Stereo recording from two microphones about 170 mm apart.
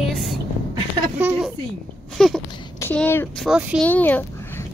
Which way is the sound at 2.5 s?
25° left (ahead or behind).